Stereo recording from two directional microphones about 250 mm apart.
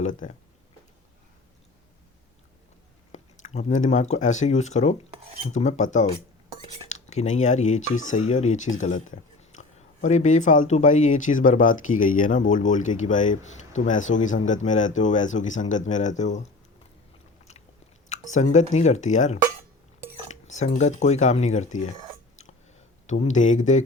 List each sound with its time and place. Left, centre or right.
0.0 s speech: left
3.1 s speech: left
18.1 s speech: left
23.0 s speech: left